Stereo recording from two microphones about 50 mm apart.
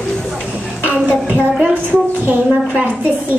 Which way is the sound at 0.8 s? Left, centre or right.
Right.